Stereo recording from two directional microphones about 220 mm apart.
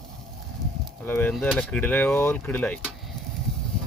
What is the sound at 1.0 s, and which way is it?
Speech, 10° left (ahead or behind).